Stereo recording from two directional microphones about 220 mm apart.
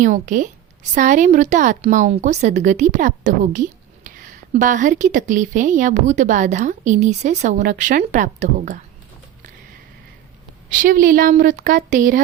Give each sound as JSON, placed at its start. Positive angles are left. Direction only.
{"t": 0.0, "sound": "a woman's voice", "side_deg": -35}
{"t": 10.7, "sound": "a woman's voice", "side_deg": -35}